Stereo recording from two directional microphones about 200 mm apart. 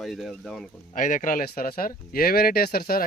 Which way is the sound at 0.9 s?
40° left (ahead or behind).